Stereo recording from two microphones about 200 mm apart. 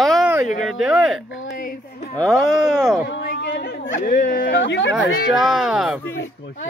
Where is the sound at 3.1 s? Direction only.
60° left (ahead or behind).